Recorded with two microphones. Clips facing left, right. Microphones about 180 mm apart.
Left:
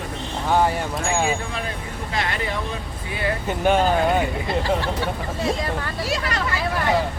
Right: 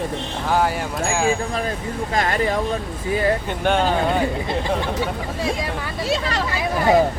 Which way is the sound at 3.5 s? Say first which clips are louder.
Left 1 dB; 5° left (ahead or behind).